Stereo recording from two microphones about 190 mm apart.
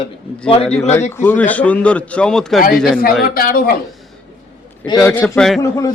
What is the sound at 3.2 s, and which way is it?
Speech, 50° left (ahead or behind).